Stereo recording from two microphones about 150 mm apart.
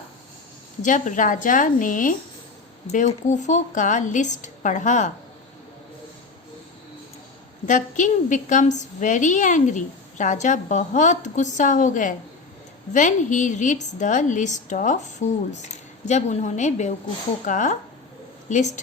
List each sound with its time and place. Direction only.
0.8 s a woman's voice: 55° left (ahead or behind)
2.8 s a woman's voice: 50° left (ahead or behind)
7.7 s a woman's voice: 60° left (ahead or behind)